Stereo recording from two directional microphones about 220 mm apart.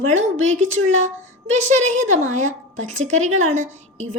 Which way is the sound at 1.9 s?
35° right (ahead or behind).